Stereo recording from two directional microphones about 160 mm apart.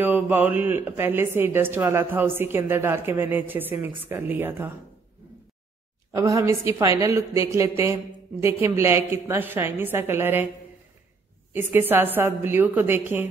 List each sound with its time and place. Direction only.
0.0 s a woman's voice: 10° right (ahead or behind)
6.1 s a woman's voice: 20° right (ahead or behind)
11.5 s a woman's voice: 15° right (ahead or behind)